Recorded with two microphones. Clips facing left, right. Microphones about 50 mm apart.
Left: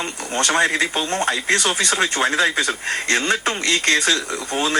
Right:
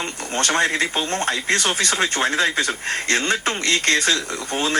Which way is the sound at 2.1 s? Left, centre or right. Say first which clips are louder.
Left 2 dB; centre.